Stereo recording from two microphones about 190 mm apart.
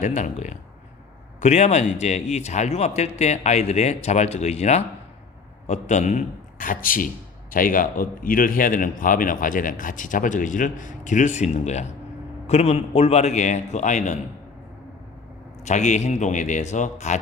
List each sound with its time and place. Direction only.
0.0 s a man's voice: 40° left (ahead or behind)
15.6 s speech: 40° left (ahead or behind)